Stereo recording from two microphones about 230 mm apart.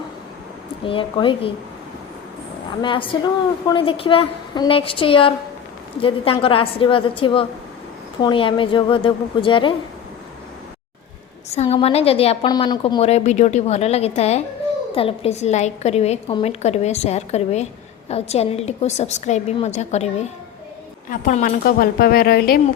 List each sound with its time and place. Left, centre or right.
0.9 s a woman's voice: left
2.8 s a woman's voice: left
11.4 s a woman's voice: left
21.1 s a woman's voice: left